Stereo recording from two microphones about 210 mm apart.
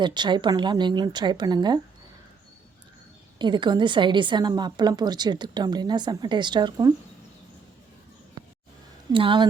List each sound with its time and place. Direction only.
0.0 s a woman's voice: 20° right (ahead or behind)
3.3 s a woman's voice: 20° right (ahead or behind)
8.4 s a sound: 20° right (ahead or behind)
9.1 s a woman's voice: 25° right (ahead or behind)